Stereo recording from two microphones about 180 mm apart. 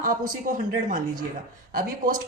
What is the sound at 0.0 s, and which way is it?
A woman's voice, 50° right (ahead or behind).